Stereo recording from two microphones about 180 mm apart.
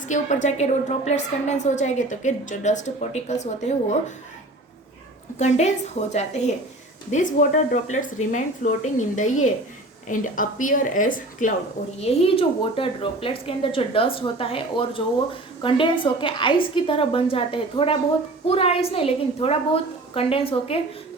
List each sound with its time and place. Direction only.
0.1 s a woman's voice: 40° left (ahead or behind)
5.4 s a woman's voice: 40° left (ahead or behind)
11.9 s a woman's voice: 35° left (ahead or behind)